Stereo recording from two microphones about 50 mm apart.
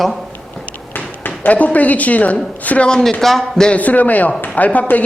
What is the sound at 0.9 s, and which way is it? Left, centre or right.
A woman's voice, left.